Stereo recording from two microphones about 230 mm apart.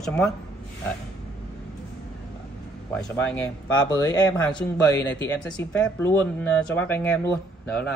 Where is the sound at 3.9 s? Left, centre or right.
Centre.